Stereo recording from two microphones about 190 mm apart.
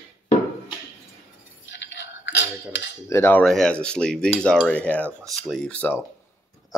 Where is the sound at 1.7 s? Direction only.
70° left (ahead or behind).